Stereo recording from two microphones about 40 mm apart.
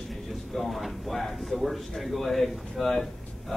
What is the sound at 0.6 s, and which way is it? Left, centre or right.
Speech, centre.